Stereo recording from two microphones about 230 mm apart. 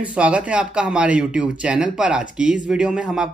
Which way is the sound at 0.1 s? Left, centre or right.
Centre.